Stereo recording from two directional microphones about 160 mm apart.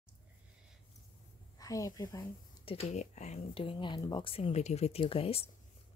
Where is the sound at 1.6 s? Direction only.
20° left (ahead or behind).